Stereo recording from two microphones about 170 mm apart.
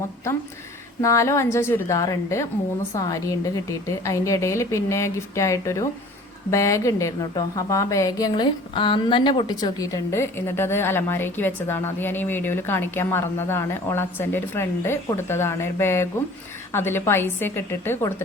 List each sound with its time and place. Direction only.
1.0 s a woman's voice: 15° left (ahead or behind)